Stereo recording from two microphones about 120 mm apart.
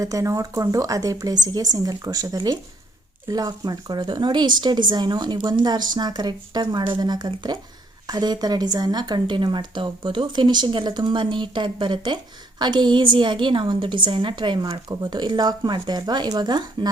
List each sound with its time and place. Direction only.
0.0 s speech: 25° right (ahead or behind)